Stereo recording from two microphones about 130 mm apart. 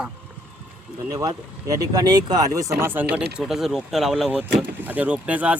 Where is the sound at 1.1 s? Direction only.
25° right (ahead or behind).